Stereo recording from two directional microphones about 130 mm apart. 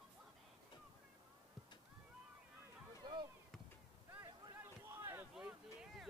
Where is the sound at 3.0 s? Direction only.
35° right (ahead or behind).